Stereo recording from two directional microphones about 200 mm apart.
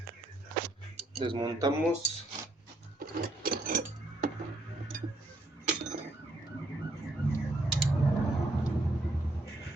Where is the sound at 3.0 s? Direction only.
45° right (ahead or behind).